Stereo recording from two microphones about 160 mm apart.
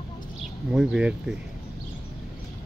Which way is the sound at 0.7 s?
5° right (ahead or behind).